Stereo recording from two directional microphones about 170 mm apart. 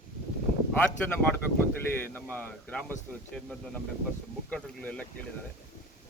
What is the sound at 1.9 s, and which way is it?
Speech, 10° left (ahead or behind).